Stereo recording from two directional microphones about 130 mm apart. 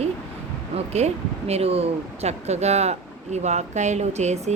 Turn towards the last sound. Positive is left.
turn(degrees=-60)  # may be behind; listen again after turning